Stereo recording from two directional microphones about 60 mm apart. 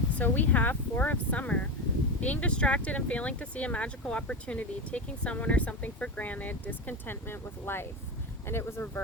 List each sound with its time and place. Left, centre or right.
0.2 s speech: left